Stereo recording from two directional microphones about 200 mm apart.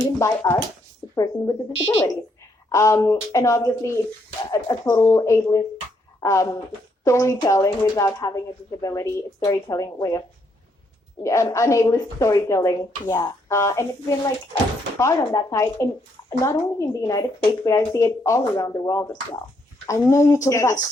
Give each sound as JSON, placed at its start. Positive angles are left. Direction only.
{"t": 0.2, "sound": "speech", "side_deg": 15}
{"t": 14.9, "sound": "speech", "side_deg": 15}